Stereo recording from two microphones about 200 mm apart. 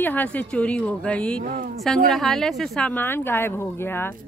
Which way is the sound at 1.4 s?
40° right (ahead or behind).